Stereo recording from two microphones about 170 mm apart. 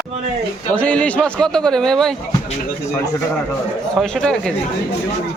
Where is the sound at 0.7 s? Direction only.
10° left (ahead or behind).